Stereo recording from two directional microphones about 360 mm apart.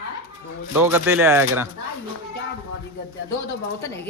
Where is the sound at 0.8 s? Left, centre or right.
Centre.